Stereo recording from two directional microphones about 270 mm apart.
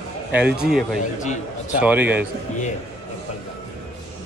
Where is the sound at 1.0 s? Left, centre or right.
Left.